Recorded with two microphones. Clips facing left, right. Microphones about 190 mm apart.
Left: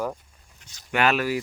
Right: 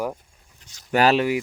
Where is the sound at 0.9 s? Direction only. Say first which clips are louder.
Right 4 dB; 35° right (ahead or behind).